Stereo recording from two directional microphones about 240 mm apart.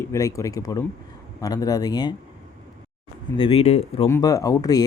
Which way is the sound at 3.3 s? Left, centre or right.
Left.